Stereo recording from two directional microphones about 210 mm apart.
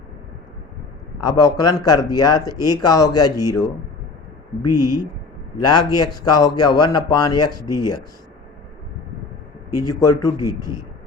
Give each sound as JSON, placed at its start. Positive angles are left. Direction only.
{"t": 1.2, "sound": "speech", "side_deg": 15}
{"t": 4.6, "sound": "speech", "side_deg": 20}
{"t": 9.7, "sound": "speech", "side_deg": 15}